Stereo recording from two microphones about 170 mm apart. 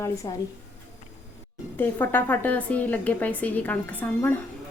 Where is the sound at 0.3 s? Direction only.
20° left (ahead or behind).